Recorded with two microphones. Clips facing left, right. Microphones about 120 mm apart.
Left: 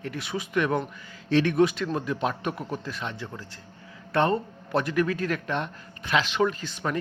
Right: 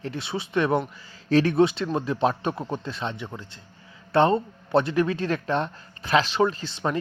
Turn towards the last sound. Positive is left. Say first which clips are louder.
# right 2 dB
turn(degrees=-30)  # may be behind; listen again after turning